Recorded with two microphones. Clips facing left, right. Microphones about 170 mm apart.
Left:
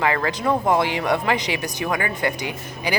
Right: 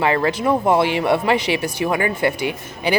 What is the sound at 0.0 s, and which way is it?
A woman's voice, 20° right (ahead or behind).